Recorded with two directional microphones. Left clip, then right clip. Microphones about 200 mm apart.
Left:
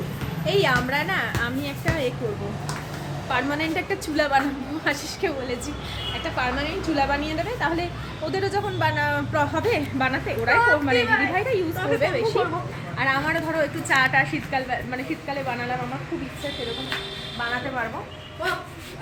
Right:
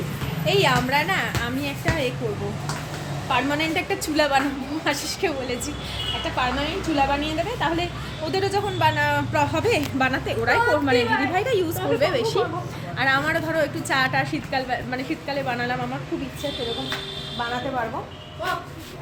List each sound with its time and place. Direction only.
0.4 s a woman's voice: 15° right (ahead or behind)
3.2 s a woman's voice: 15° right (ahead or behind)